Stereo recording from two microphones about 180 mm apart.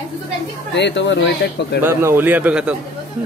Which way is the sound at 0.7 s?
80° left.